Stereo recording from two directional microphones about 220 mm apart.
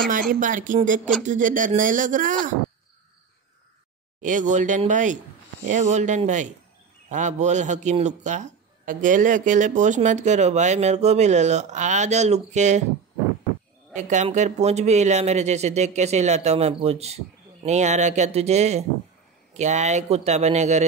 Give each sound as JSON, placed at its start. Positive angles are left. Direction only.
{"t": 0.3, "sound": "a man's voice", "side_deg": -35}
{"t": 4.2, "sound": "a man's voice", "side_deg": -35}
{"t": 13.9, "sound": "a man's voice", "side_deg": -35}